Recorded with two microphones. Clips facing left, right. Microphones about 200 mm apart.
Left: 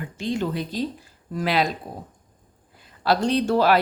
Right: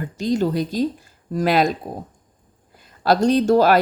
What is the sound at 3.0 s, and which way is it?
Speech, 45° right (ahead or behind).